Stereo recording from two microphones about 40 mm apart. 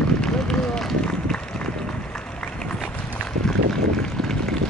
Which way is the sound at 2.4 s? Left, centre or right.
Left.